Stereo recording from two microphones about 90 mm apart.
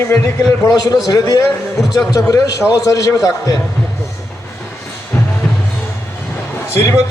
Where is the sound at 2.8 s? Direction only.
35° left (ahead or behind).